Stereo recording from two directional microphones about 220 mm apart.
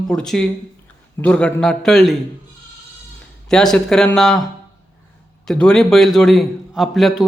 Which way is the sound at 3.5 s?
5° left (ahead or behind).